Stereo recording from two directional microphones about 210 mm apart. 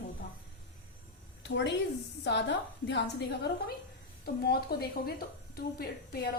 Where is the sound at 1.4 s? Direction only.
55° left (ahead or behind).